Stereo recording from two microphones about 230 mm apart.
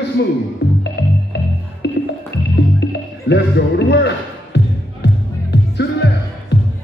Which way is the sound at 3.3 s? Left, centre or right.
Left.